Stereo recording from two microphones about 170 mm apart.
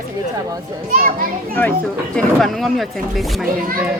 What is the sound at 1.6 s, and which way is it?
Speech, 15° left (ahead or behind).